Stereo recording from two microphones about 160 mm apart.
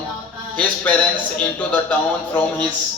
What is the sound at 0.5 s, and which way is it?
A man's voice, 10° left (ahead or behind).